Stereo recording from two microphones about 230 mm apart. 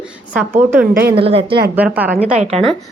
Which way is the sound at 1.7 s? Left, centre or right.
Centre.